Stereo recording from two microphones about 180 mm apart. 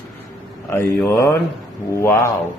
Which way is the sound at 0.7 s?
15° left (ahead or behind).